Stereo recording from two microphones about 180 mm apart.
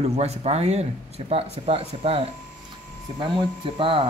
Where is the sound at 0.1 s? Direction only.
35° right (ahead or behind).